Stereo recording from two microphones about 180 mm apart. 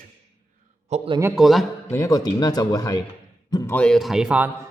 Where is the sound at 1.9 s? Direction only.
20° left (ahead or behind).